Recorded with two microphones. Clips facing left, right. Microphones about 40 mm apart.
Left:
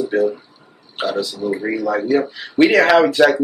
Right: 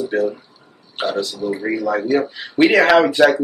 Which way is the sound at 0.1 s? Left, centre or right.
Centre.